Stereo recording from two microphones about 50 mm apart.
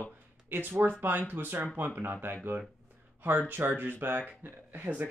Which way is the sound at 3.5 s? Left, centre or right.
Right.